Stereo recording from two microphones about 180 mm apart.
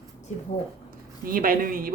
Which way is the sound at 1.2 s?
50° right (ahead or behind).